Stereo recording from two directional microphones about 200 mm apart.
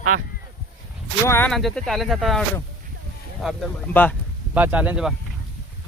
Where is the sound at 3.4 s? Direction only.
5° left (ahead or behind).